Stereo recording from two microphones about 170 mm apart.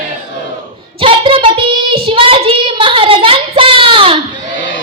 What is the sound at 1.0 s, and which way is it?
Child singing, 30° right (ahead or behind).